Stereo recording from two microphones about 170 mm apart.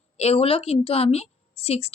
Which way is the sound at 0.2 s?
35° left (ahead or behind).